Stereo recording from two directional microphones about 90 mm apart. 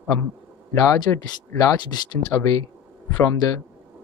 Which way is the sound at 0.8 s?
45° left (ahead or behind).